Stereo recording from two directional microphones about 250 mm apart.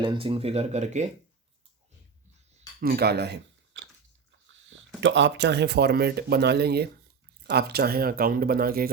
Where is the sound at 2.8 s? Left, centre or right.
Right.